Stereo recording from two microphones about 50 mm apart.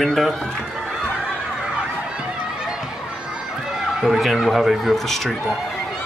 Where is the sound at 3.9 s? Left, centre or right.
Centre.